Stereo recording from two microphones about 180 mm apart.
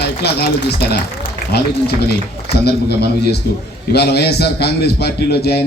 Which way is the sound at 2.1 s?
65° left (ahead or behind).